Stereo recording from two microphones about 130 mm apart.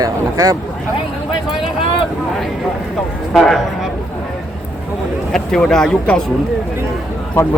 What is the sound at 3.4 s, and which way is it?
Speech, centre (ahead or behind).